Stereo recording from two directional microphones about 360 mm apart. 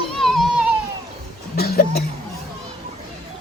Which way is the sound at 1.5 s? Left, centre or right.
Left.